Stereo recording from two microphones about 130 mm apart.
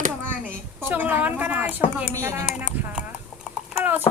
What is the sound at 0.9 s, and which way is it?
Speech, 15° right (ahead or behind).